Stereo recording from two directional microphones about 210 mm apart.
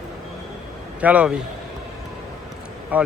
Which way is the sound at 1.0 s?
5° right (ahead or behind).